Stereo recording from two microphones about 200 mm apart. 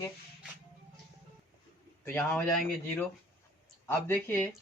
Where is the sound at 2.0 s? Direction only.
10° left (ahead or behind).